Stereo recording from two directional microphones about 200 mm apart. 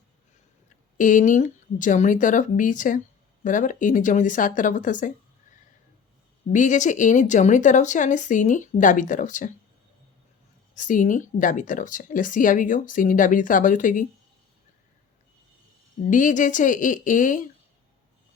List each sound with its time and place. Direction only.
0.9 s speech: 40° left (ahead or behind)
6.5 s speech: 40° left (ahead or behind)
10.8 s speech: 40° left (ahead or behind)
16.0 s speech: 40° left (ahead or behind)